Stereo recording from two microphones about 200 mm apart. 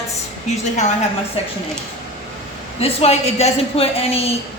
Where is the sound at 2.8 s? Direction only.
30° left (ahead or behind).